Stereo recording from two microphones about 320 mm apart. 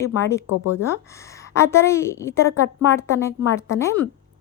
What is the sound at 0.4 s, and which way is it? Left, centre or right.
Speech, left.